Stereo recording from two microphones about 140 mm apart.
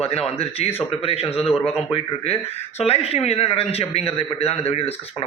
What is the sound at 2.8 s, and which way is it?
A man's voice, 45° left (ahead or behind).